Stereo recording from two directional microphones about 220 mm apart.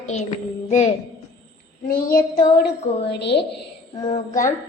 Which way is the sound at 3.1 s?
50° left (ahead or behind).